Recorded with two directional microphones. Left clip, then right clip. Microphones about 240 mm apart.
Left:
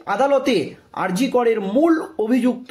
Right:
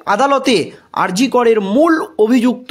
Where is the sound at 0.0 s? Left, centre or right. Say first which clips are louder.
Right 5 dB; right.